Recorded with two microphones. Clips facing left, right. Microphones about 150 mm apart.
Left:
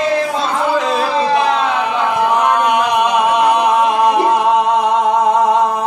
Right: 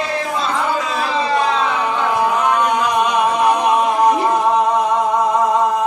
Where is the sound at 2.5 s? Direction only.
70° left (ahead or behind).